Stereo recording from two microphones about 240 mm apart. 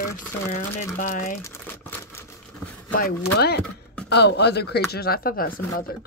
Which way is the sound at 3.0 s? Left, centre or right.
Left.